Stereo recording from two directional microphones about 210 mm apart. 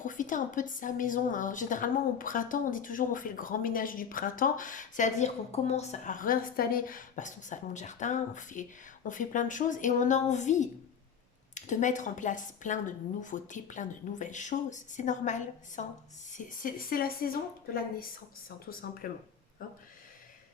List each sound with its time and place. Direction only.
0.0 s a woman's voice: 40° left (ahead or behind)